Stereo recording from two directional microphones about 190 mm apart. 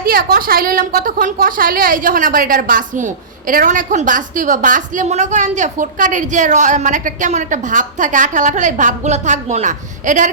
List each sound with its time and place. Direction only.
0.0 s a woman's voice: 50° right (ahead or behind)